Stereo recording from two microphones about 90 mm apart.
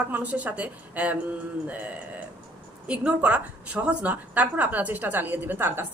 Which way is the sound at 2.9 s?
15° right (ahead or behind).